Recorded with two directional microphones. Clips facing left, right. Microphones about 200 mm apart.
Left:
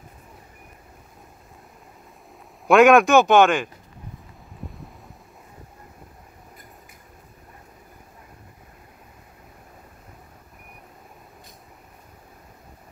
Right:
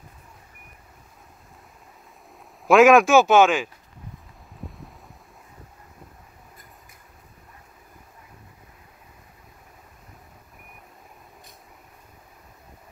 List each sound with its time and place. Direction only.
2.6 s speech: centre (ahead or behind)
4.6 s wind: centre (ahead or behind)